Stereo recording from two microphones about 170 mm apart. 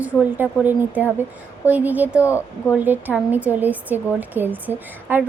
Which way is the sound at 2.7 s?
10° right (ahead or behind).